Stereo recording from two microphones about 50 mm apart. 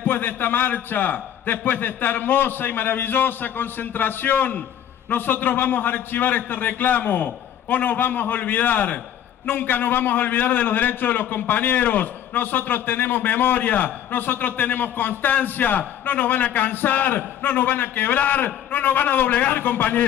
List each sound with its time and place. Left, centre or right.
0.0 s a man's voice: left